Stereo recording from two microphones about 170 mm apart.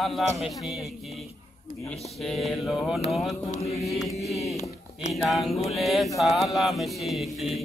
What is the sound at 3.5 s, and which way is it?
Music, 40° left (ahead or behind).